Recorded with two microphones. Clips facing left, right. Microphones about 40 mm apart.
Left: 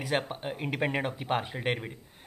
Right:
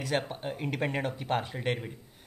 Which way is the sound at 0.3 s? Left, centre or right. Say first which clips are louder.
Even; centre.